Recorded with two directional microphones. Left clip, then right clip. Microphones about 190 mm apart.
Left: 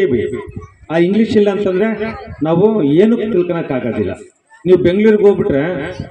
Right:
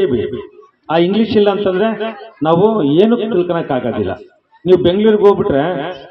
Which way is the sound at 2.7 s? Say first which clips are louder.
Even; 10° left (ahead or behind).